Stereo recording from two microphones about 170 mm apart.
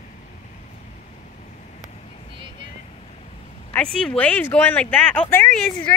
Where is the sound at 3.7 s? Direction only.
5° left (ahead or behind).